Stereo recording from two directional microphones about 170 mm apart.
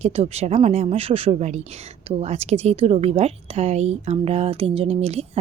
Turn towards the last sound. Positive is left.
turn(degrees=-35)  # may be behind; listen again after turning